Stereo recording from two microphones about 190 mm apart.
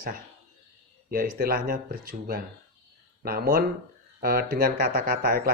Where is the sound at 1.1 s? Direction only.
50° right (ahead or behind).